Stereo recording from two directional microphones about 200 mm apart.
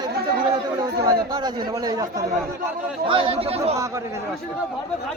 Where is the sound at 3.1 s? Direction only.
25° right (ahead or behind).